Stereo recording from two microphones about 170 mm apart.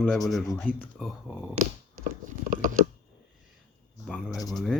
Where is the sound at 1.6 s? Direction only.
35° right (ahead or behind).